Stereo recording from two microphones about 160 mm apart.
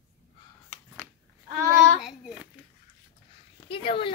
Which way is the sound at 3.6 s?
35° left (ahead or behind).